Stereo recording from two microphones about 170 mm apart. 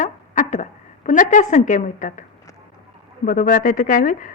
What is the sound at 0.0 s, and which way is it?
A woman's voice, 50° left (ahead or behind).